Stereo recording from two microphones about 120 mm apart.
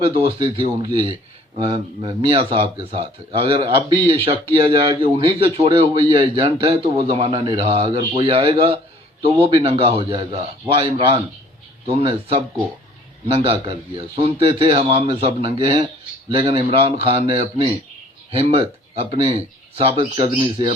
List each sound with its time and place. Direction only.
0.0 s a man's voice: 55° right (ahead or behind)